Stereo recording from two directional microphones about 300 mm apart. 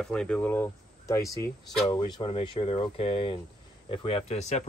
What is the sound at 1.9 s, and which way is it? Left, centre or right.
Speech, centre.